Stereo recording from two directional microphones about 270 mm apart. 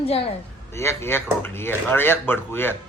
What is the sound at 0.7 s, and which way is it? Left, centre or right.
Speech, centre.